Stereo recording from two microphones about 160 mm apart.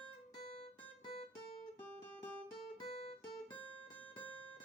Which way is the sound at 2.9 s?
40° left (ahead or behind).